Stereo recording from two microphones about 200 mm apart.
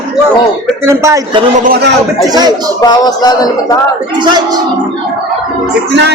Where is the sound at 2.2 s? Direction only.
20° right (ahead or behind).